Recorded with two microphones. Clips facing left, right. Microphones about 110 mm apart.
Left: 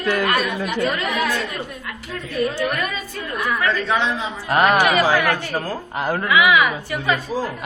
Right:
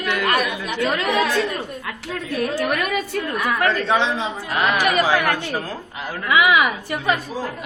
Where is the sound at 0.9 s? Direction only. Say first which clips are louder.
Right 2 dB; 90° right.